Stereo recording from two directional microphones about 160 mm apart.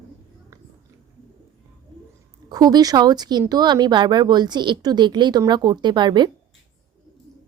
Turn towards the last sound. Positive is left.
turn(degrees=-30)  # may be behind; listen again after turning